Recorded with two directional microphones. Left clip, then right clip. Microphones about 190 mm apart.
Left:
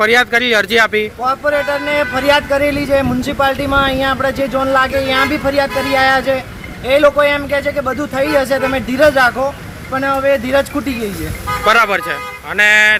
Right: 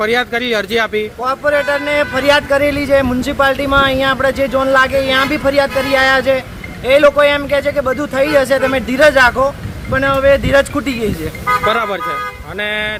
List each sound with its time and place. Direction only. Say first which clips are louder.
0.0 s speech: left 4 dB; 5° right (ahead or behind)
1.2 s speech: right 2 dB; 30° right (ahead or behind)
11.6 s speech: left 4 dB; centre (ahead or behind)